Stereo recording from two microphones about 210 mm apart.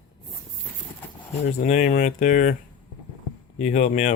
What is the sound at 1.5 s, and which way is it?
Speech, 35° left (ahead or behind).